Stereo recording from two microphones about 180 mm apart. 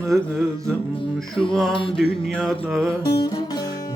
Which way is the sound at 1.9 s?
Centre (ahead or behind).